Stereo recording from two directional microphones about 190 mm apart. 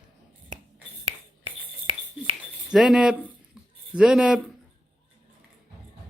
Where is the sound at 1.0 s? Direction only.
30° right (ahead or behind).